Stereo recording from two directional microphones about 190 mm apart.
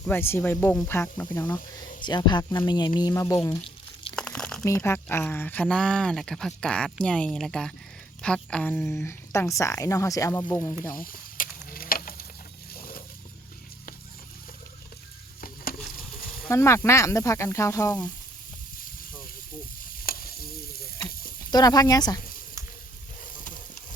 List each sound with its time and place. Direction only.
0.0 s speech: 10° left (ahead or behind)
4.1 s crumpling: 5° left (ahead or behind)
4.6 s speech: 15° left (ahead or behind)
10.9 s mechanisms: 50° left (ahead or behind)
12.7 s a sound: 50° left (ahead or behind)
15.4 s frying: 50° left (ahead or behind)
16.5 s speech: 15° left (ahead or behind)
19.8 s stir: 50° left (ahead or behind)
21.5 s speech: 20° left (ahead or behind)